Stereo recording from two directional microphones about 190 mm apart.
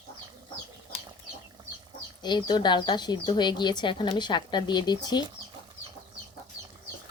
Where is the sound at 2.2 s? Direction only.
25° left (ahead or behind).